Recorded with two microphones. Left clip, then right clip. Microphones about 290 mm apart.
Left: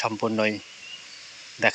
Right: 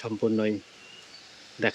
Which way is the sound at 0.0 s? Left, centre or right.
Centre.